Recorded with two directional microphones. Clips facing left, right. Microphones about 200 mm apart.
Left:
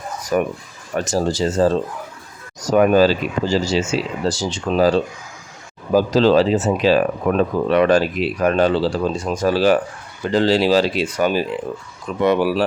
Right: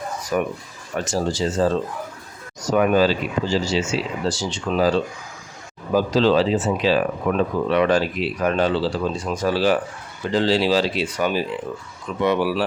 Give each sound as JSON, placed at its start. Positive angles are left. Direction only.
{"t": 0.3, "sound": "speech", "side_deg": 45}
{"t": 5.9, "sound": "speech", "side_deg": 40}